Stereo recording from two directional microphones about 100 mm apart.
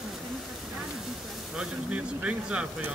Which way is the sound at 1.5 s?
10° right (ahead or behind).